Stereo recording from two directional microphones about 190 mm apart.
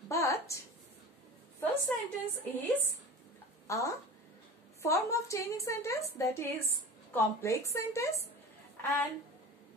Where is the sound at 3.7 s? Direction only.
15° left (ahead or behind).